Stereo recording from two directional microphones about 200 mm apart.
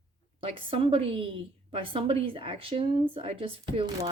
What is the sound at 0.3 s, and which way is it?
A woman's voice, 25° right (ahead or behind).